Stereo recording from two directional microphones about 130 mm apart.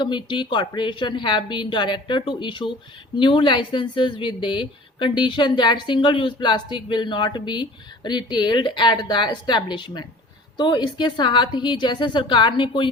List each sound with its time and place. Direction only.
0.0 s a woman's voice: 35° left (ahead or behind)